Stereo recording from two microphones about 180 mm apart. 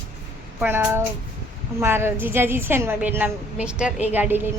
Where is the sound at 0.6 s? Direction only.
15° right (ahead or behind).